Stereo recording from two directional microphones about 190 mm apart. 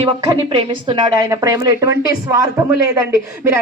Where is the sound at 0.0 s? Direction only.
25° right (ahead or behind).